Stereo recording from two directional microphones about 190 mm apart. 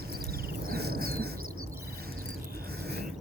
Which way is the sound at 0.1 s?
50° right (ahead or behind).